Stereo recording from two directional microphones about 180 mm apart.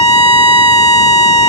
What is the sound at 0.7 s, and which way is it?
Alarm, 20° left (ahead or behind).